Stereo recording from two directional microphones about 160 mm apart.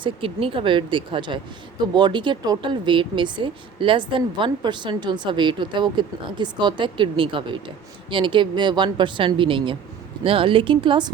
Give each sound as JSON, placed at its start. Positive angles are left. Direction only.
{"t": 0.0, "sound": "speech", "side_deg": -35}